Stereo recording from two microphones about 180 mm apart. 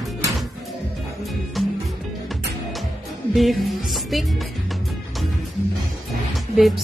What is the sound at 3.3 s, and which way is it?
Music, centre (ahead or behind).